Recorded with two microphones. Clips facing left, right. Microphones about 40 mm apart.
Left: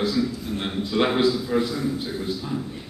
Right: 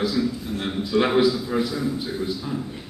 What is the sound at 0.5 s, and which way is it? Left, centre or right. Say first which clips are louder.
Speech: right 1 dB; left.